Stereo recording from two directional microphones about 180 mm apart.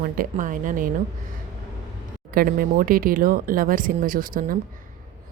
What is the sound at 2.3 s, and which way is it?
A woman's voice, 55° right (ahead or behind).